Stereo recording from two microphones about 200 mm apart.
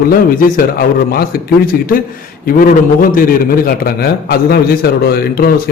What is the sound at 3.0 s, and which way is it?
A man's voice, 45° left (ahead or behind).